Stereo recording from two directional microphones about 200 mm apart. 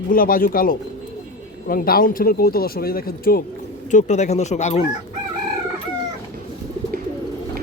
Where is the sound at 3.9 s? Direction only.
35° left (ahead or behind).